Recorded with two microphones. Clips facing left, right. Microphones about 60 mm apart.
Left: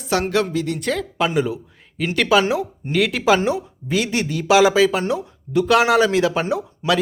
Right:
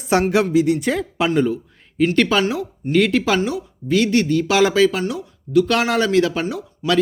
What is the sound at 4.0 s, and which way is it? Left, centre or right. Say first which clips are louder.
Speech: right 5 dB; centre.